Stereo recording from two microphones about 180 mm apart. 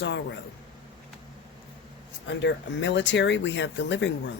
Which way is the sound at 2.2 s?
85° left.